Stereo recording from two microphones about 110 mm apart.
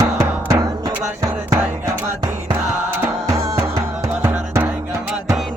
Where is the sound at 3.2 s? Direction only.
30° right (ahead or behind).